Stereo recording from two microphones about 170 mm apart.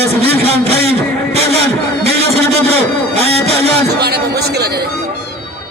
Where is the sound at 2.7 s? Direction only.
35° right (ahead or behind).